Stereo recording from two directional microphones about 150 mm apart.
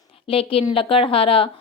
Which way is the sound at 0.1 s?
35° left (ahead or behind).